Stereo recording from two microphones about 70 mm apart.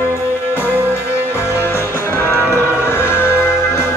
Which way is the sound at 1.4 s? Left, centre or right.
Left.